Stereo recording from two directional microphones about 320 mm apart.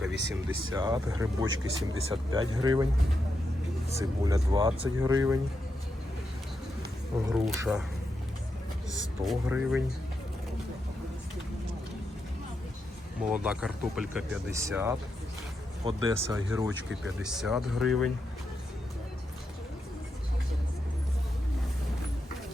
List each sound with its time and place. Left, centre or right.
0.1 s speech: right
0.4 s speech: centre
1.5 s speech: right
2.3 s speech: centre
3.9 s speech: centre
7.4 s speech: centre
9.2 s speech: centre
13.2 s speech: centre